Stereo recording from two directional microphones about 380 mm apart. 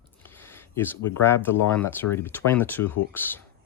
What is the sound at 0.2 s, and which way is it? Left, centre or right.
Speech, centre.